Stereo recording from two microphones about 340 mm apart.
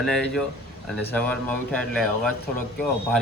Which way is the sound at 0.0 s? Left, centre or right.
Centre.